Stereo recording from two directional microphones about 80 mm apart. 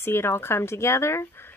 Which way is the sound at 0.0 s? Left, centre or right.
Left.